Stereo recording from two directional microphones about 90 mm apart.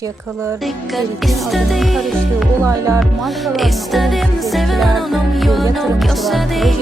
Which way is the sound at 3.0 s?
Centre (ahead or behind).